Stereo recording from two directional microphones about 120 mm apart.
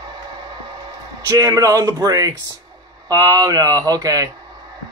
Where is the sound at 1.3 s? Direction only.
30° right (ahead or behind).